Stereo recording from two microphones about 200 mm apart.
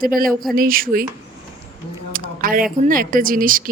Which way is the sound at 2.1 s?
45° right (ahead or behind).